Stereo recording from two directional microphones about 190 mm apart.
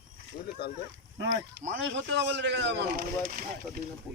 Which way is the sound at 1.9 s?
70° right (ahead or behind).